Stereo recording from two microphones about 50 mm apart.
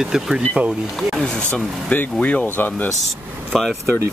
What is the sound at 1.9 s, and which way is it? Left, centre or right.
Speech, left.